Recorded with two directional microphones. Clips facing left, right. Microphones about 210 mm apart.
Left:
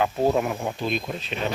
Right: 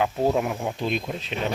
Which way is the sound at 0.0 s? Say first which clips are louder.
Left 1 dB; 5° right (ahead or behind).